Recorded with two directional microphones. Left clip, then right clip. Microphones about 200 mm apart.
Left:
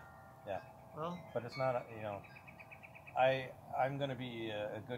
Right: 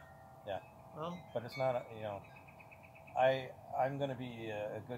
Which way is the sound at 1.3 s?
50° right (ahead or behind).